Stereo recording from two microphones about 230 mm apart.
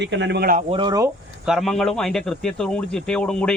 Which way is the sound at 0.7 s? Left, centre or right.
Centre.